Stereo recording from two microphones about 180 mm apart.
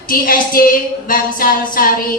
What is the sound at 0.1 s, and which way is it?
A woman's voice, 50° left (ahead or behind).